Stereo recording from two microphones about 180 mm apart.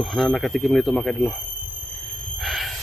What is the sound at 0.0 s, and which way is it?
Speech, centre (ahead or behind).